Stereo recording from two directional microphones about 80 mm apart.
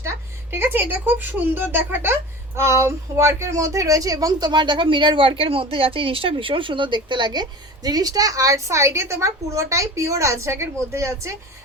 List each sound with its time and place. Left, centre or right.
0.5 s a woman's voice: right